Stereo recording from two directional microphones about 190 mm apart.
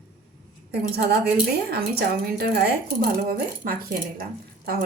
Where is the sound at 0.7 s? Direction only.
60° right (ahead or behind).